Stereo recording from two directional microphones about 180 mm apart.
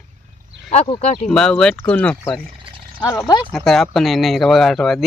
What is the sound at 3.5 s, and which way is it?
Speech, centre (ahead or behind).